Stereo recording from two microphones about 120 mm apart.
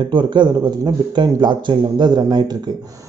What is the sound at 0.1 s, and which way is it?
A man's voice, 40° right (ahead or behind).